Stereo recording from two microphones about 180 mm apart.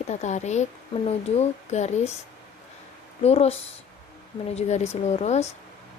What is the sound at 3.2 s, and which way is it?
Speech, 35° left (ahead or behind).